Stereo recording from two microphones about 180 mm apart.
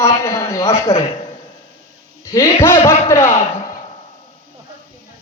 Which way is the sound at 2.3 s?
15° left (ahead or behind).